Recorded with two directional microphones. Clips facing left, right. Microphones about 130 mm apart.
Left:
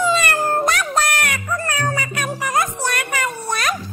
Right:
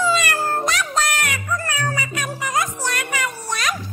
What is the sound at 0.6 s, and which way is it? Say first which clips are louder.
Music: left 3 dB; 55° left (ahead or behind).